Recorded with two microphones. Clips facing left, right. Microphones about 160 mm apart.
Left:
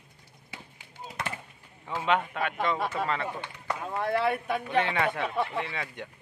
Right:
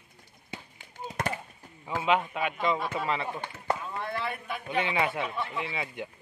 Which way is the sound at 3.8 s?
50° left (ahead or behind).